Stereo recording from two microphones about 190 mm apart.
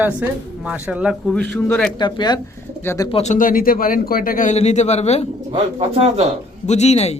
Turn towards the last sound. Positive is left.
turn(degrees=35)  # may be behind; listen again after turning